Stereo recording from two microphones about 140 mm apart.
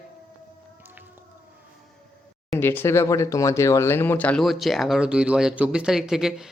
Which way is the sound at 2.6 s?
15° left (ahead or behind).